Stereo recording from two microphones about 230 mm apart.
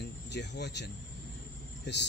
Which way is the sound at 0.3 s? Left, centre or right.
Left.